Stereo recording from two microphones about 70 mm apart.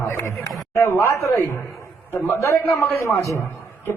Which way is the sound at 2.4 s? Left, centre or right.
Left.